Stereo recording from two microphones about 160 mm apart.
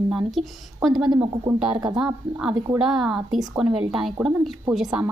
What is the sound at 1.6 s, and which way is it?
A woman's voice, 5° right (ahead or behind).